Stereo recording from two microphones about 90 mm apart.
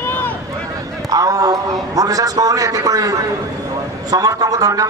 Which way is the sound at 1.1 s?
40° right (ahead or behind).